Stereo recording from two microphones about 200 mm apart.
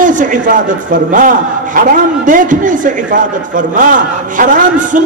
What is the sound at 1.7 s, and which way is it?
A man's voice, 40° right (ahead or behind).